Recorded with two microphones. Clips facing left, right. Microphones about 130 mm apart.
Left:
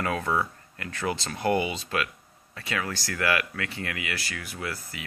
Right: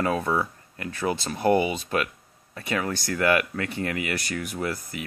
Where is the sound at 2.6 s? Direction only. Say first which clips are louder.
Right 4 dB; 25° right (ahead or behind).